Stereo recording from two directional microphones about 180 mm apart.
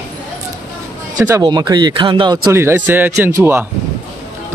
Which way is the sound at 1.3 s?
25° right (ahead or behind).